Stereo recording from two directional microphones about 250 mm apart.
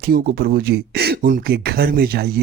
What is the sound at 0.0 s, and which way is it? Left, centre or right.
Speech, right.